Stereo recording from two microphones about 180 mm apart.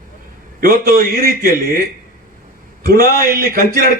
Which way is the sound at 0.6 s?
55° right (ahead or behind).